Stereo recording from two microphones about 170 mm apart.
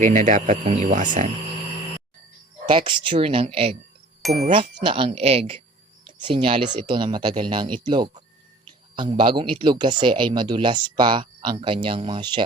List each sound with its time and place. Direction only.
0.0 s speech: 50° right (ahead or behind)
2.6 s speech: 30° right (ahead or behind)
4.2 s speech: centre (ahead or behind)
4.4 s speech: 35° right (ahead or behind)